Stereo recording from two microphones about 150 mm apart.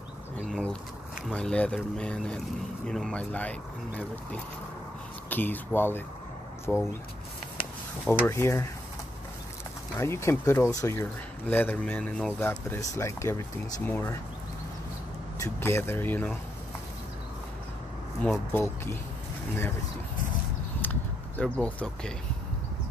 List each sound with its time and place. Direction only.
0.4 s a sound: 5° left (ahead or behind)
1.3 s speech: 5° left (ahead or behind)
8.1 s speech: 15° left (ahead or behind)
9.9 s speech: 15° left (ahead or behind)
15.3 s speech: 20° left (ahead or behind)
18.5 s speech: 15° left (ahead or behind)
20.8 s a sound: 10° left (ahead or behind)